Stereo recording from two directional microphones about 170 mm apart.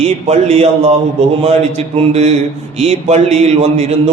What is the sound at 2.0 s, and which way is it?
A man's voice, 40° right (ahead or behind).